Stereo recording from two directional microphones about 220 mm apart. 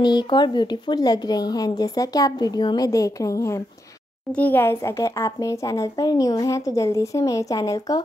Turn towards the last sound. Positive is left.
turn(degrees=15)  # may be behind; listen again after turning